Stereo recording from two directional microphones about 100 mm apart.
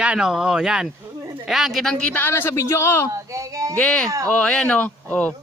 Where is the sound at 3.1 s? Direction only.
30° right (ahead or behind).